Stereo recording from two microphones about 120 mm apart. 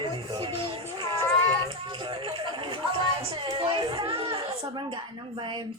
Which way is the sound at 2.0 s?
45° right (ahead or behind).